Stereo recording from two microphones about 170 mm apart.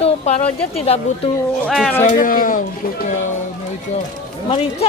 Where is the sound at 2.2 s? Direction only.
55° left (ahead or behind).